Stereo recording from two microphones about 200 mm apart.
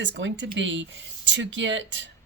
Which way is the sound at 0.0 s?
65° right (ahead or behind).